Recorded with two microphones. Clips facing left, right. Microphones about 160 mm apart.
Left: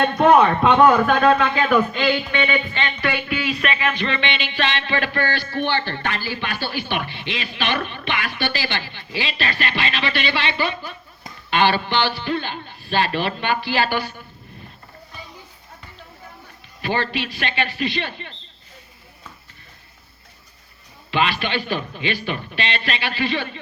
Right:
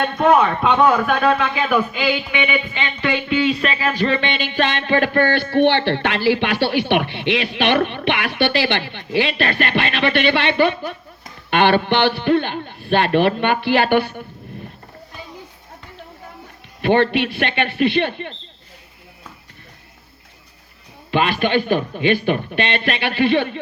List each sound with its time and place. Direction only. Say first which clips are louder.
0.0 s a man's voice: left 1 dB; 5° left (ahead or behind); by 14.3 s 60° right (ahead or behind)
16.8 s a man's voice: right 8 dB; 60° right (ahead or behind)
21.1 s a man's voice: right 4 dB; 50° right (ahead or behind)